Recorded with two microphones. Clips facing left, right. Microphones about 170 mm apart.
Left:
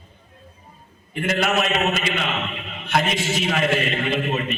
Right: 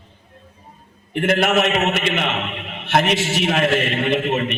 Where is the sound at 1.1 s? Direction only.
70° right (ahead or behind).